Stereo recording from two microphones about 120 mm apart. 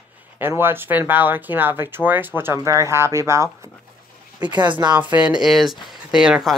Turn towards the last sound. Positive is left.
turn(degrees=-5)  # may be behind; listen again after turning